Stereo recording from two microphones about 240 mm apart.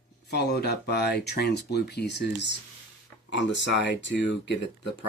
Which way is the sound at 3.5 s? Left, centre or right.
Left.